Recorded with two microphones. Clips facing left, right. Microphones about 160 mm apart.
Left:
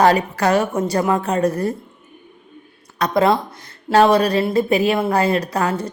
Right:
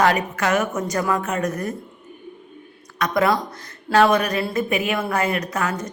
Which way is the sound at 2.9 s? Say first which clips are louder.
Left 3 dB; 30° left (ahead or behind).